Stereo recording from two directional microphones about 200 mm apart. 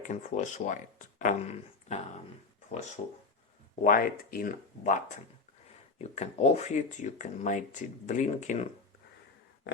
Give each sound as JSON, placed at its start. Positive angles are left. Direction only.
{"t": 0.0, "sound": "speech", "side_deg": 35}
{"t": 3.8, "sound": "speech", "side_deg": 45}